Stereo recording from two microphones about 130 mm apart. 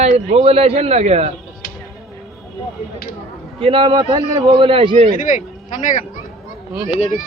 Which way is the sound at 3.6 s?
40° right (ahead or behind).